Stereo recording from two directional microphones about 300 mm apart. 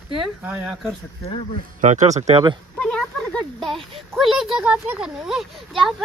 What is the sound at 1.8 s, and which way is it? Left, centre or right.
Speech, right.